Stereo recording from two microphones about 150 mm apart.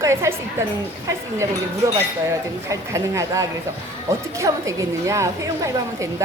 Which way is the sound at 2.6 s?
20° right (ahead or behind).